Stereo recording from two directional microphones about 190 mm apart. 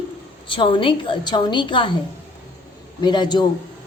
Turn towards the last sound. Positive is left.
turn(degrees=25)  # may be behind; listen again after turning